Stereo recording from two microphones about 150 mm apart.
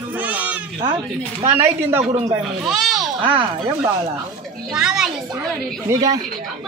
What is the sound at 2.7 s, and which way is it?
Speech, centre (ahead or behind).